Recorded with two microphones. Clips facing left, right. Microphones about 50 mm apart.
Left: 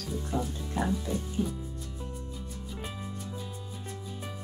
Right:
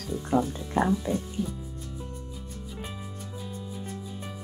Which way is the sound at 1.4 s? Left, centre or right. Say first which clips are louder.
Left 1 dB; left.